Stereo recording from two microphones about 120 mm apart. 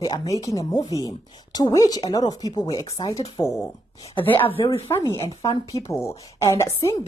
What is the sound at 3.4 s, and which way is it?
Speech, 20° left (ahead or behind).